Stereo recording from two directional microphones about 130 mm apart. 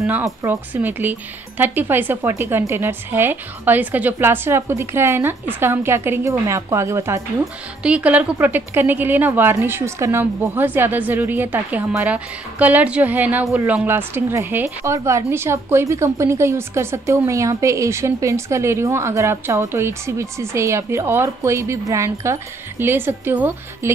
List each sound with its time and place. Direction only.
0.0 s a woman's voice: 20° right (ahead or behind)
7.8 s a woman's voice: 10° right (ahead or behind)